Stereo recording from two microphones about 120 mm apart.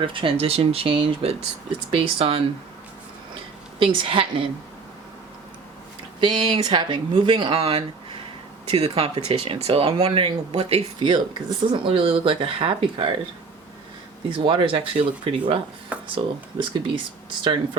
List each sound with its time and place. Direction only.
0.0 s speech: 45° right (ahead or behind)
3.8 s speech: 50° right (ahead or behind)
6.1 s speech: 40° right (ahead or behind)
7.6 s speech: 55° right (ahead or behind)
10.1 s speech: 45° right (ahead or behind)
10.5 s speech: 60° right (ahead or behind)
11.0 s speech: 40° right (ahead or behind)
14.3 s speech: 50° right (ahead or behind)